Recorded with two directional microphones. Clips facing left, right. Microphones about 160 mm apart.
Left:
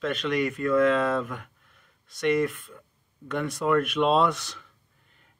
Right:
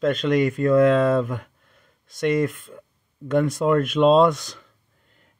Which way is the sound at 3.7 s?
40° right (ahead or behind).